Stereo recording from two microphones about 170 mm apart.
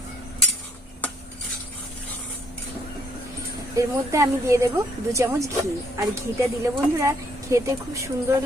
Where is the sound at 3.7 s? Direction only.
15° right (ahead or behind).